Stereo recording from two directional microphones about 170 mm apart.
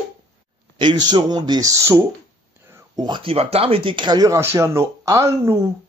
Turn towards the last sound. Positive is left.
turn(degrees=-15)  # may be behind; listen again after turning